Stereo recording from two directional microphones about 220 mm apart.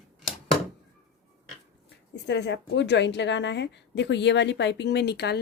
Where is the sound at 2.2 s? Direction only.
50° left (ahead or behind).